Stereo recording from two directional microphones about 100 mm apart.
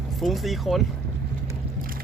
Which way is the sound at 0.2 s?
Centre (ahead or behind).